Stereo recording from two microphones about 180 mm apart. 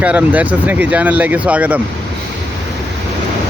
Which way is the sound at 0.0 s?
10° right (ahead or behind).